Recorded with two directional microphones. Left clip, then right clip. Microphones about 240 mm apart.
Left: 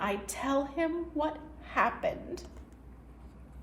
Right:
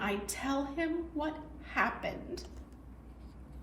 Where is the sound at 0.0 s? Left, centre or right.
Left.